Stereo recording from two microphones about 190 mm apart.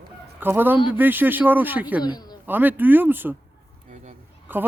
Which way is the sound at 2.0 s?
20° left (ahead or behind).